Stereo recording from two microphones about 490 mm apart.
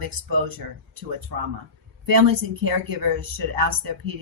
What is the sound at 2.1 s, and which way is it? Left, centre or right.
Speech, right.